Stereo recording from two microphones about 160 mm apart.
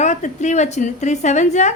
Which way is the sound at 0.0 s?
45° left (ahead or behind).